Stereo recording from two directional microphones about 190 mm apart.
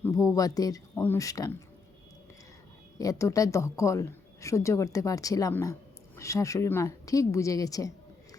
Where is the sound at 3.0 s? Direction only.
15° left (ahead or behind).